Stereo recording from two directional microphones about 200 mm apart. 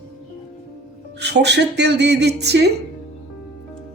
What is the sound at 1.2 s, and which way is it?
Speech, 60° right (ahead or behind).